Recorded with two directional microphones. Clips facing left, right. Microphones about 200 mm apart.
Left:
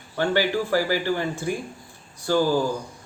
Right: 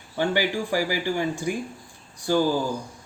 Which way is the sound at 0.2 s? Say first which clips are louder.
Left 2 dB; 15° right (ahead or behind).